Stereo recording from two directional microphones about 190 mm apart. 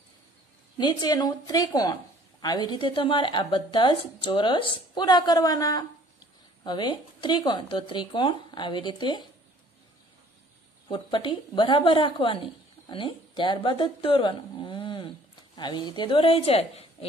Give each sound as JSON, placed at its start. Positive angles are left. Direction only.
{"t": 0.7, "sound": "speech", "side_deg": 20}
{"t": 10.9, "sound": "a woman's voice", "side_deg": 25}